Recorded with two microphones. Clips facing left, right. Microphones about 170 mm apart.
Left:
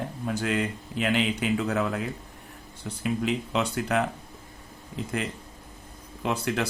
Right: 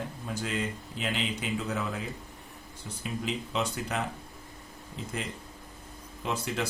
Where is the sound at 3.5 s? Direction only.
65° left (ahead or behind).